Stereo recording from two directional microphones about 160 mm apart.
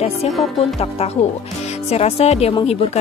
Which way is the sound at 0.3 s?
Centre (ahead or behind).